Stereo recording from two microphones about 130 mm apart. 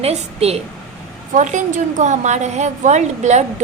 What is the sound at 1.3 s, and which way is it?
A woman's voice, 70° right (ahead or behind).